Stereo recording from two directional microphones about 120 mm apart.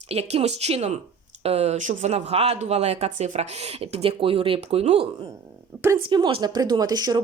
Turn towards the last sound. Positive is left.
turn(degrees=-35)  # may be behind; listen again after turning